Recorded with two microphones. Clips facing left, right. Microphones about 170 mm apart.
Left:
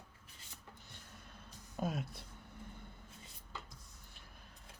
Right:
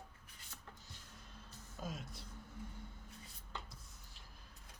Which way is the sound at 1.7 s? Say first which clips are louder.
Left 8 dB; 60° left (ahead or behind).